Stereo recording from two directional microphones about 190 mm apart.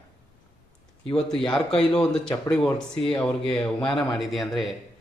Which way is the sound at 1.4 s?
5° left (ahead or behind).